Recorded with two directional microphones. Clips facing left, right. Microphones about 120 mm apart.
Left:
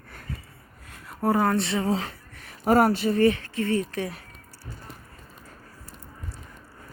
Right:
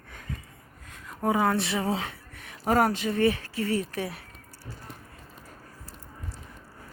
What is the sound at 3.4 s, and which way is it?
Speech, 30° right (ahead or behind).